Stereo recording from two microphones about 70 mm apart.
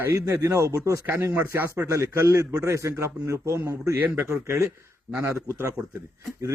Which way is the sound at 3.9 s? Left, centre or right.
Right.